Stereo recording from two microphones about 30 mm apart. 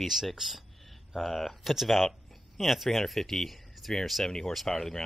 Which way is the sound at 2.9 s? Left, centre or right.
Centre.